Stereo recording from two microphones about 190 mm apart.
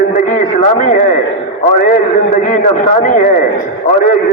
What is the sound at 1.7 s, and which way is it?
A man's voice, 40° left (ahead or behind).